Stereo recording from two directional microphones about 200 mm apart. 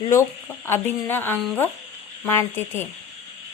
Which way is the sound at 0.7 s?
10° left (ahead or behind).